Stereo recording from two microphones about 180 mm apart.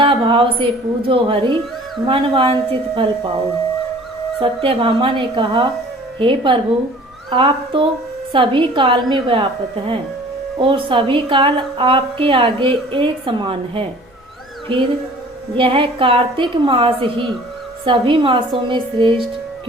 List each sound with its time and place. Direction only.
0.0 s a woman's voice: 30° right (ahead or behind)
4.4 s a woman's voice: 30° right (ahead or behind)
15.5 s a woman's voice: 30° right (ahead or behind)